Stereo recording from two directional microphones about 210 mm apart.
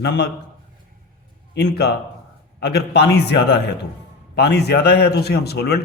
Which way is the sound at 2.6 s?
55° left (ahead or behind).